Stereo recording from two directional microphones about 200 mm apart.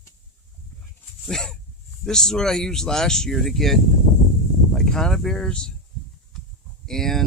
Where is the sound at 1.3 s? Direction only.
Centre (ahead or behind).